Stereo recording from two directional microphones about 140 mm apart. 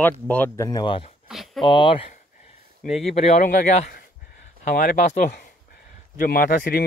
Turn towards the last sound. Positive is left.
turn(degrees=90)